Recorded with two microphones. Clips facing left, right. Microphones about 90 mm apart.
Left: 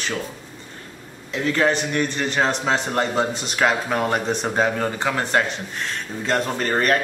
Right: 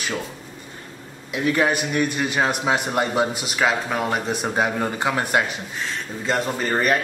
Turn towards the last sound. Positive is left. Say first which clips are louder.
# left 1 dB
turn(degrees=-5)  # may be behind; listen again after turning